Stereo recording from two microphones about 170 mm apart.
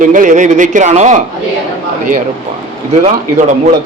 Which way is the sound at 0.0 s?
50° right (ahead or behind).